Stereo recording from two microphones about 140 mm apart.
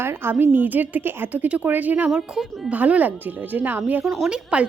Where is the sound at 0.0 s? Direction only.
15° right (ahead or behind).